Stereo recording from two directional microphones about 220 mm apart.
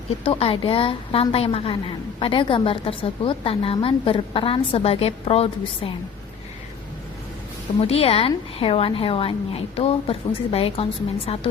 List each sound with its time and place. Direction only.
0.3 s a woman's voice: 25° left (ahead or behind)
7.8 s a woman's voice: 25° left (ahead or behind)